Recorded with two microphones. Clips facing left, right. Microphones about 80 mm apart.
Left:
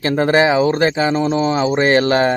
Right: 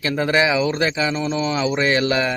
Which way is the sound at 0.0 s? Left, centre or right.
Left.